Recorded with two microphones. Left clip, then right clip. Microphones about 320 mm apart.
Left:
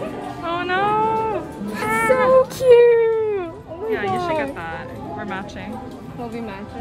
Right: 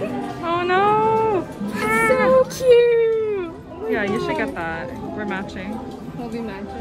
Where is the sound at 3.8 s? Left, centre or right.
Centre.